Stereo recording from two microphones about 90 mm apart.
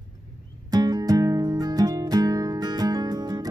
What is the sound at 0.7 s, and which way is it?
Music, 45° right (ahead or behind).